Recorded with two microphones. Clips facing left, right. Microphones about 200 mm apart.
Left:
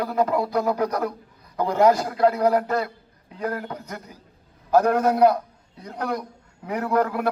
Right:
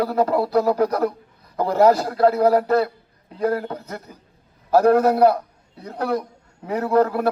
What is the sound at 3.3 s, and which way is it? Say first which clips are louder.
Speech: right 6 dB; 35° right (ahead or behind).